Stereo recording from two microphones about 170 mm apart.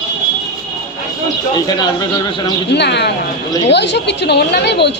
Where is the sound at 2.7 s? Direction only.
85° left.